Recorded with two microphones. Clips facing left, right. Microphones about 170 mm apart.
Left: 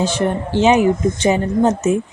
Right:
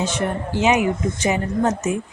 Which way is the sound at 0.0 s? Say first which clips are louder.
Left 5 dB; 30° left (ahead or behind).